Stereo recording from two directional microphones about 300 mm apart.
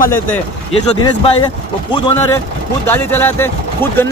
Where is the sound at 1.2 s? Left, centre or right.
Centre.